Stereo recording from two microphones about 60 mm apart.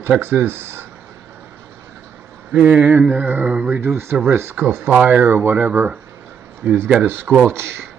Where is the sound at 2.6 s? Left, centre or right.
Right.